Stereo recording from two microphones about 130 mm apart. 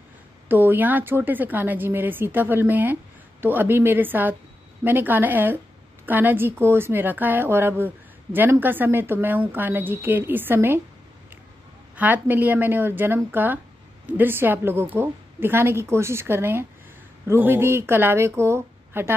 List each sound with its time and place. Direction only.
0.5 s speech: 15° right (ahead or behind)
12.0 s speech: 15° right (ahead or behind)